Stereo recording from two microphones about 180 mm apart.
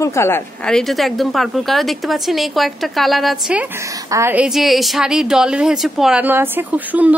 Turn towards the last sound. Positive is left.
turn(degrees=-10)  # may be behind; listen again after turning